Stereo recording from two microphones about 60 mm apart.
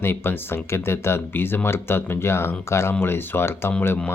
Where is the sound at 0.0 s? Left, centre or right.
Left.